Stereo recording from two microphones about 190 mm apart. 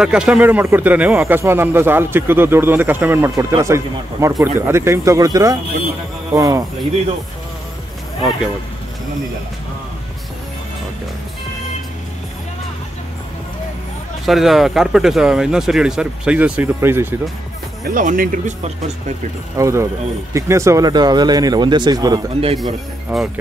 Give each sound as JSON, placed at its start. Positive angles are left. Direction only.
{"t": 0.0, "sound": "speech", "side_deg": -5}
{"t": 14.2, "sound": "speech", "side_deg": 0}
{"t": 17.8, "sound": "speech", "side_deg": -45}
{"t": 19.5, "sound": "speech", "side_deg": -15}
{"t": 23.1, "sound": "speech", "side_deg": -5}